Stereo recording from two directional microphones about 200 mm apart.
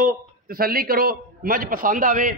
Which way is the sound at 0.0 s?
45° right (ahead or behind).